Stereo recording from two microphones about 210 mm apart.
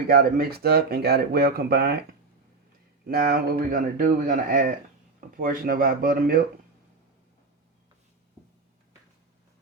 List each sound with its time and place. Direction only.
0.1 s speech: 45° right (ahead or behind)
3.1 s speech: 45° right (ahead or behind)